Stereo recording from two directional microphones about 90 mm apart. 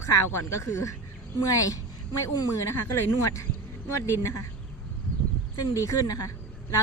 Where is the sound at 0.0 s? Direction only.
35° left (ahead or behind).